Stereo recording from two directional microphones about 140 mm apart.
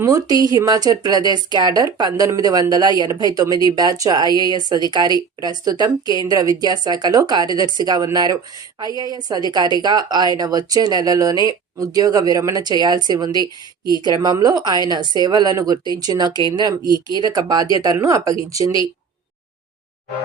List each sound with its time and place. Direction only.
0.0 s speech: 25° right (ahead or behind)